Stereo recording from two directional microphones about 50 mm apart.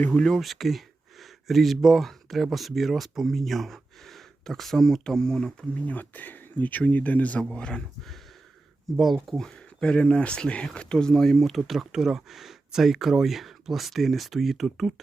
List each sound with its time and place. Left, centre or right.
0.1 s speech: centre
0.3 s speech: centre
5.8 s speech: left; by 7.8 s centre
9.4 s speech: centre